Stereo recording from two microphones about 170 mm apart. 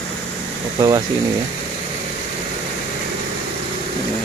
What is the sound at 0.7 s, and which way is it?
Speech, 25° right (ahead or behind).